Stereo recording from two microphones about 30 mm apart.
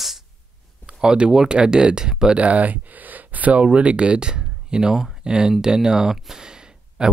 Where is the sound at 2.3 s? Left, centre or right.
Right.